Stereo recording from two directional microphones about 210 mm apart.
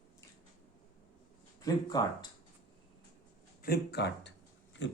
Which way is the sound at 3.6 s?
50° left (ahead or behind).